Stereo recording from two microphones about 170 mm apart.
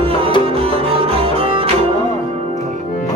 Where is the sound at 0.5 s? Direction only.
35° right (ahead or behind).